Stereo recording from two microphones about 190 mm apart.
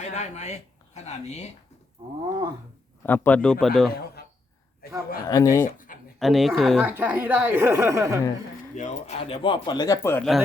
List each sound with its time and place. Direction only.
0.0 s speech: 35° left (ahead or behind)
3.0 s a man's voice: 10° left (ahead or behind)
4.8 s a man's voice: 55° left (ahead or behind)
5.2 s speech: 20° left (ahead or behind)
5.6 s speech: 45° left (ahead or behind)
6.1 s a man's voice: centre (ahead or behind)
6.8 s a woman's voice: 10° right (ahead or behind)
8.7 s speech: 40° left (ahead or behind); by 10.2 s 15° left (ahead or behind)